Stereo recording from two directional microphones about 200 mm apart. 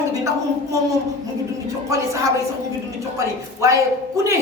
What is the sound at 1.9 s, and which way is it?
Speech, 15° right (ahead or behind).